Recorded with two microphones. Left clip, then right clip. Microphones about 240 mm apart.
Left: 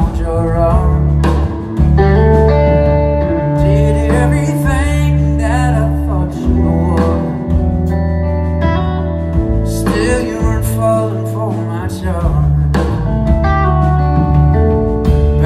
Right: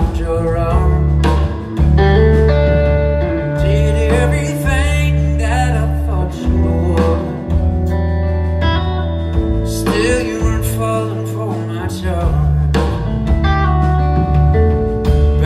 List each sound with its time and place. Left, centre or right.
2.0 s music: centre
3.5 s music: centre
9.8 s music: centre